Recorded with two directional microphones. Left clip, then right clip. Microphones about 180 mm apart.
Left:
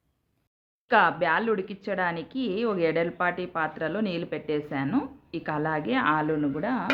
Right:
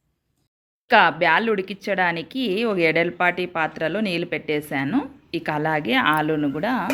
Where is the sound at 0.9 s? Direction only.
15° right (ahead or behind).